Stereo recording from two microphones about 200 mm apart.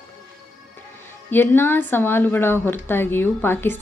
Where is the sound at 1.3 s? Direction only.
10° left (ahead or behind).